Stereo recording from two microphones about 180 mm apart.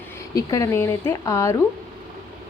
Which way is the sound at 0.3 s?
20° left (ahead or behind).